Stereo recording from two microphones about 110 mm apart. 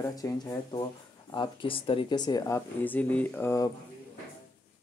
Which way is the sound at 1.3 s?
45° left (ahead or behind).